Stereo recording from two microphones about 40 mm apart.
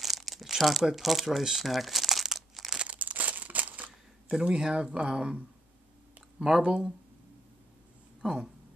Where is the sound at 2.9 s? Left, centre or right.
Right.